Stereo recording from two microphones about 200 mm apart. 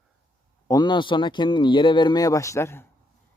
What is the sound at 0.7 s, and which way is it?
A man's voice, 20° left (ahead or behind).